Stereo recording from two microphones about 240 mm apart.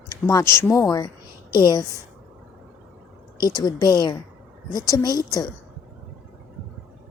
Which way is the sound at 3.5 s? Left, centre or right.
Centre.